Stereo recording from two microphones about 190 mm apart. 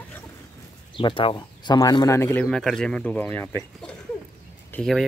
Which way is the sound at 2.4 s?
Centre (ahead or behind).